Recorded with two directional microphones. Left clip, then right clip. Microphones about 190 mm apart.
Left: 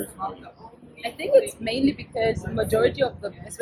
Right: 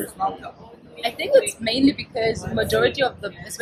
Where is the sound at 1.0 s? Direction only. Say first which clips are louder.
Right 2 dB; 25° right (ahead or behind).